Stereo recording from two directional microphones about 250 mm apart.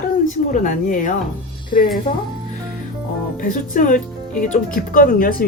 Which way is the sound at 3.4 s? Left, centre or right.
Left.